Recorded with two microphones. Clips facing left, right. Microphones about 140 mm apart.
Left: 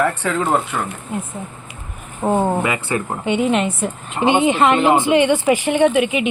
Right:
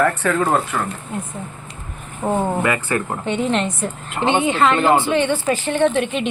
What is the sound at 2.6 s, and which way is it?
Speech, 20° left (ahead or behind).